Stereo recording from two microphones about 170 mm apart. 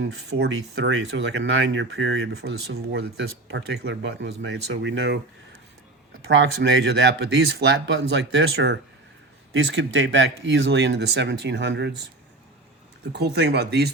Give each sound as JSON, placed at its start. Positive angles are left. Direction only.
{"t": 0.0, "sound": "speech", "side_deg": -90}
{"t": 6.3, "sound": "speech", "side_deg": -90}
{"t": 13.1, "sound": "speech", "side_deg": -80}